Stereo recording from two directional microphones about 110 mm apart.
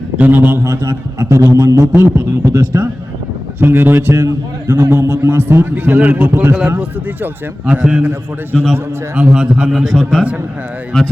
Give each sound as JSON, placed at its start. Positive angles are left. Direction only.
{"t": 0.2, "sound": "a man's voice", "side_deg": -15}
{"t": 8.5, "sound": "a man's voice", "side_deg": 5}
{"t": 9.1, "sound": "a man's voice", "side_deg": -10}